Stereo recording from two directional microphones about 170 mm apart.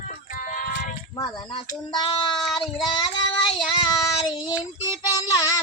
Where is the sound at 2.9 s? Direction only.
25° left (ahead or behind).